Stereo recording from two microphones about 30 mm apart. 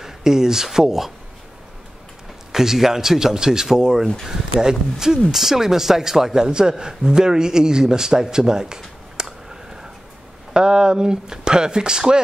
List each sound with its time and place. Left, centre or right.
0.0 s speech: centre
2.5 s a man's voice: centre
10.5 s a man's voice: right